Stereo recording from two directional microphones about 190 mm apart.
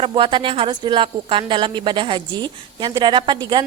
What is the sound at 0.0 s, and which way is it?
Speech, 25° right (ahead or behind).